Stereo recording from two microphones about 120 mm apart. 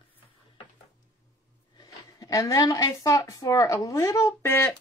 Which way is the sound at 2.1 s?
25° left (ahead or behind).